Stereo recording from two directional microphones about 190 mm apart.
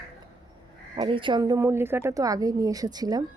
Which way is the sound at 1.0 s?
25° right (ahead or behind).